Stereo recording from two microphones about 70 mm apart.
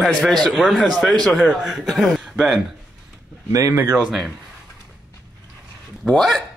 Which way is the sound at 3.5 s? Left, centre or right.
Right.